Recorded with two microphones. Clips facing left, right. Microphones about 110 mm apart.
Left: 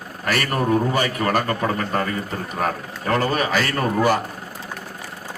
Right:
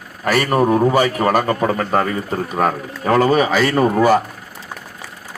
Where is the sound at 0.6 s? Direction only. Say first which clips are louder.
Right 4 dB; 30° right (ahead or behind).